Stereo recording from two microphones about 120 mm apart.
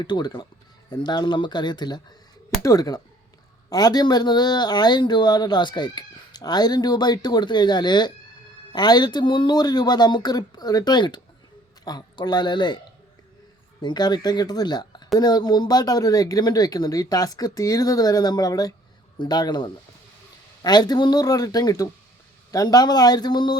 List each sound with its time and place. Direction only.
0.0 s speech: 35° left (ahead or behind)
13.8 s speech: 35° left (ahead or behind)